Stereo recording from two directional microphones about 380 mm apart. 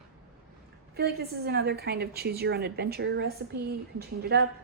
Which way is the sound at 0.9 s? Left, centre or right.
Right.